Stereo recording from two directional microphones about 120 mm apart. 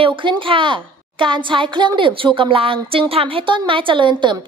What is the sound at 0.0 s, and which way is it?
A woman's voice, 45° right (ahead or behind).